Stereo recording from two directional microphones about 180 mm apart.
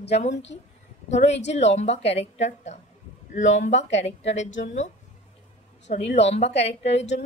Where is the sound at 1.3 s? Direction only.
75° left (ahead or behind).